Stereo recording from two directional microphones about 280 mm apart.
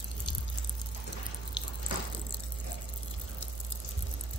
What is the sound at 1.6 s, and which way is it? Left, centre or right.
Water, centre.